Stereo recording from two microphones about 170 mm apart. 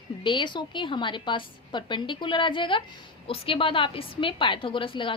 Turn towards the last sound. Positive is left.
turn(degrees=30)  # may be behind; listen again after turning